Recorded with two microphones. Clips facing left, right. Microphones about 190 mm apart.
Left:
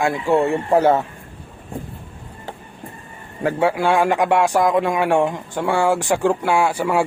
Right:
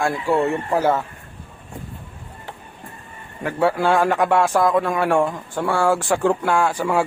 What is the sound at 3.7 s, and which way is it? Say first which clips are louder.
Speech: left 1 dB; 10° left (ahead or behind).